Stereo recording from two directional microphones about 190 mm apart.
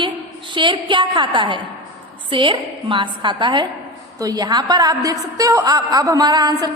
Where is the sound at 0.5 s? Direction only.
25° right (ahead or behind).